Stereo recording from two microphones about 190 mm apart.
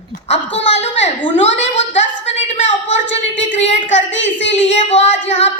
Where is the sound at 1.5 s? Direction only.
75° left (ahead or behind).